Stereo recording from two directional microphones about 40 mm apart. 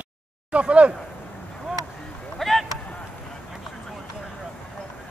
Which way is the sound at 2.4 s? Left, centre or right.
Centre.